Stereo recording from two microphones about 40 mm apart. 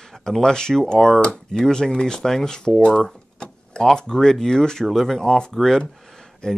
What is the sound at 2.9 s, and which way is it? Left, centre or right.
Door, centre.